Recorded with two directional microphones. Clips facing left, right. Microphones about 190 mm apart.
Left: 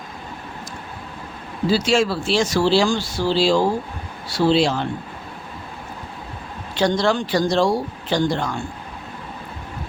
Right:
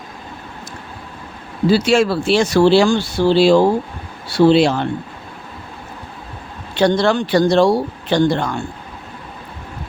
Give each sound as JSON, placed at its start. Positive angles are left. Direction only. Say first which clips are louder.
{"t": 1.7, "sound": "speech", "louder": "right 4 dB", "side_deg": -60}
{"t": 6.7, "sound": "speech", "louder": "right 4 dB", "side_deg": -60}